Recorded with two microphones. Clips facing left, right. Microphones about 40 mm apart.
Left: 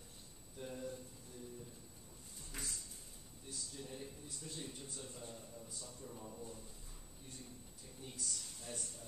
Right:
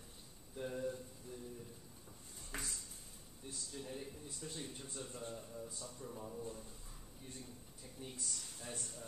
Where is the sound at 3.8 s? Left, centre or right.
Right.